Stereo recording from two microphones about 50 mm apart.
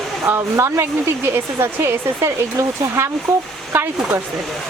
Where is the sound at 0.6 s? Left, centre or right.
Right.